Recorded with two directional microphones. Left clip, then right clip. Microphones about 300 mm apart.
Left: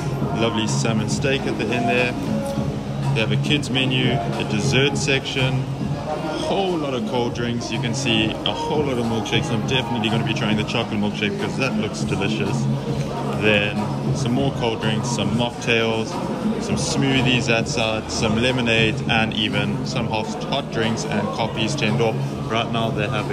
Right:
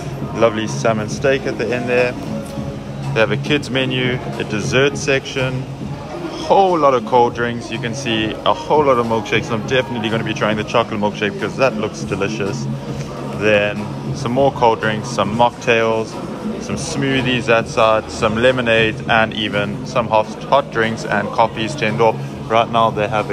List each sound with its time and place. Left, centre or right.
0.4 s speech: centre
3.2 s speech: centre
6.5 s a man's voice: right
6.9 s speech: centre